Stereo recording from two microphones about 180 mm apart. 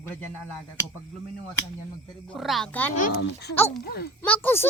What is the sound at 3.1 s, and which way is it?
Speech, 70° left (ahead or behind).